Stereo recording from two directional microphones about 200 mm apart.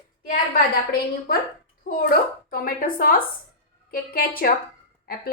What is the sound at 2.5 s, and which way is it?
A woman's voice, 45° left (ahead or behind).